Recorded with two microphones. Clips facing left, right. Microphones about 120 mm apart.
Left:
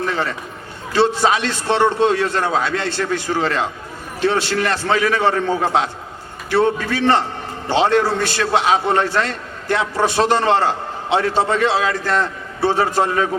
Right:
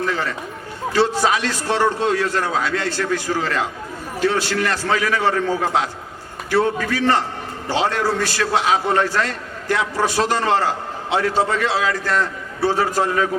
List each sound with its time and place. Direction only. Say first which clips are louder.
0.1 s a man's voice: left 1 dB; 25° left (ahead or behind)